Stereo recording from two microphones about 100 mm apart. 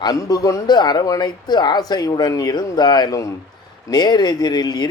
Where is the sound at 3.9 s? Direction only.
45° left (ahead or behind).